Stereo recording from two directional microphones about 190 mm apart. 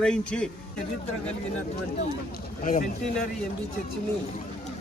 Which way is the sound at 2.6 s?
45° left (ahead or behind).